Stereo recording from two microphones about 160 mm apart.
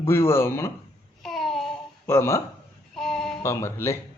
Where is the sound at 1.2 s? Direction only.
Centre (ahead or behind).